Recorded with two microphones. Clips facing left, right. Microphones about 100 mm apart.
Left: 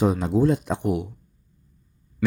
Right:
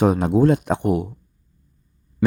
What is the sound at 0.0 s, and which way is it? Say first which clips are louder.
Speech: right 4 dB; 60° right (ahead or behind).